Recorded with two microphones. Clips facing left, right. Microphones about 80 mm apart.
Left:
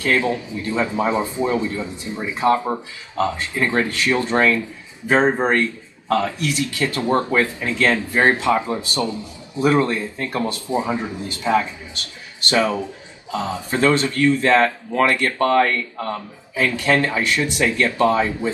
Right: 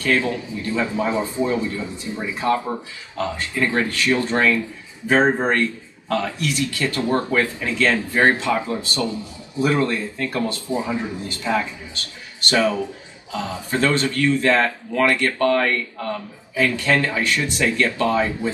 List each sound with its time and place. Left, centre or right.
0.0 s speech: left
5.5 s speech: left
6.1 s speech: left
10.7 s speech: left
16.5 s speech: left